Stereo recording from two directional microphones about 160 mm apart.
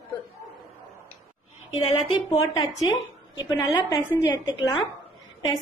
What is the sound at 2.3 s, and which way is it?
A woman's voice, 25° left (ahead or behind).